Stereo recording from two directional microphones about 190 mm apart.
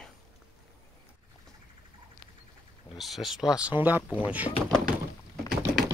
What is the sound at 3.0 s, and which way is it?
Speech, centre (ahead or behind).